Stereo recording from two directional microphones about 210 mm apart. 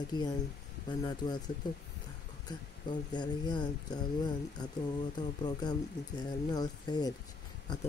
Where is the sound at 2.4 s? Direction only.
20° left (ahead or behind).